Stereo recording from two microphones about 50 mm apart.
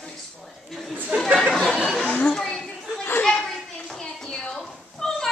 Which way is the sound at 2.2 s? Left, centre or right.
Centre.